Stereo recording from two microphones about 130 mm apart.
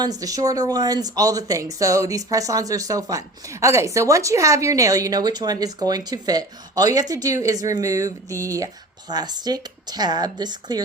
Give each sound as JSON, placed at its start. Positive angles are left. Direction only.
{"t": 0.0, "sound": "speech", "side_deg": -30}